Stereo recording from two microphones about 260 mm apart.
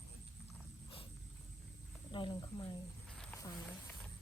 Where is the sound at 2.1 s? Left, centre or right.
Centre.